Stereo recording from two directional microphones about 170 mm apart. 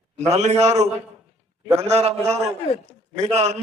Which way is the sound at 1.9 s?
35° right (ahead or behind).